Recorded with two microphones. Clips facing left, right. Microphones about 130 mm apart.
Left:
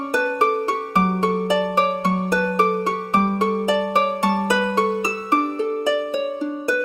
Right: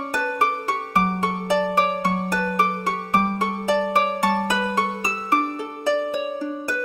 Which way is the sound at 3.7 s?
15° left (ahead or behind).